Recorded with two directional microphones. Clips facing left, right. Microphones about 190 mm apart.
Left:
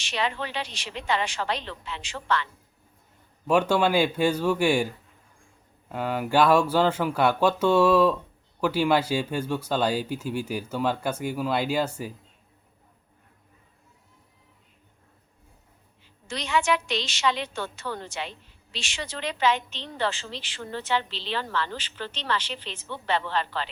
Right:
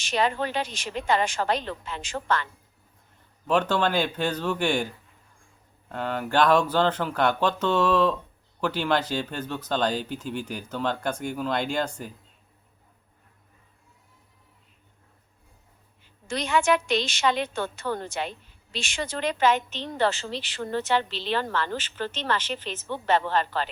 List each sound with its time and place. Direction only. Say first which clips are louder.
0.0 s a woman's voice: right 4 dB; 45° right (ahead or behind)
3.4 s speech: left 2 dB; 10° left (ahead or behind)
5.9 s speech: left 2 dB; 10° left (ahead or behind)
16.2 s a woman's voice: right 2 dB; 50° right (ahead or behind)